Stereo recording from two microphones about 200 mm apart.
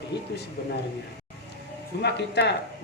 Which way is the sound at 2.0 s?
55° left (ahead or behind).